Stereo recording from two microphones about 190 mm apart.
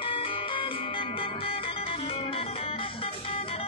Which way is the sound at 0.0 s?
30° left (ahead or behind).